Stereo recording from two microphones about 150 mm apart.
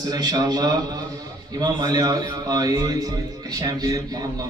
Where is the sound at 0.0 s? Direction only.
25° right (ahead or behind).